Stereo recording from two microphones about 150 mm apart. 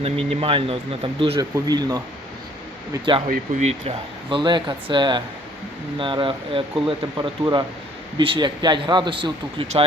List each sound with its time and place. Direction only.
0.0 s speech: 40° right (ahead or behind)
3.6 s speech: 45° right (ahead or behind)